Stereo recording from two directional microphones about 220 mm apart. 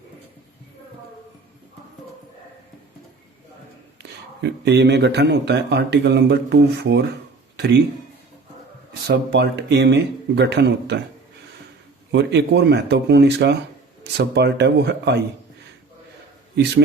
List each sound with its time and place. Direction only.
4.4 s a man's voice: 50° right (ahead or behind)
7.5 s a sound: 50° right (ahead or behind)
8.9 s a man's voice: 50° right (ahead or behind)
12.1 s a man's voice: 50° right (ahead or behind)